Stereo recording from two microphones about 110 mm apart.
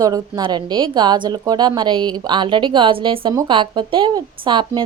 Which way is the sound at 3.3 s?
40° right (ahead or behind).